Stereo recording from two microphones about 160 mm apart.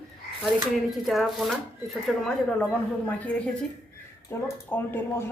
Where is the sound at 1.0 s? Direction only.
Centre (ahead or behind).